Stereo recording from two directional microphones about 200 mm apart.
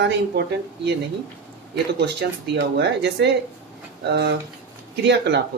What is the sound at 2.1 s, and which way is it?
Speech, 60° right (ahead or behind).